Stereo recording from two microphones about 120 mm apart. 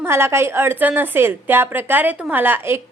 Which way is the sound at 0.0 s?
20° right (ahead or behind).